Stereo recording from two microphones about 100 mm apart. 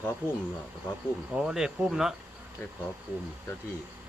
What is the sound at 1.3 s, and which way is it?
Speech, 5° right (ahead or behind).